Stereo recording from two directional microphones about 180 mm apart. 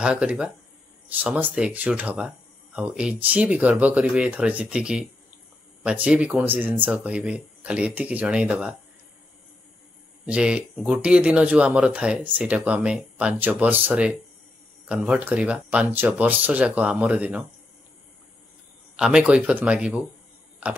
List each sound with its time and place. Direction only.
0.0 s speech: 5° right (ahead or behind)
10.2 s speech: 5° right (ahead or behind)
18.9 s speech: 5° right (ahead or behind)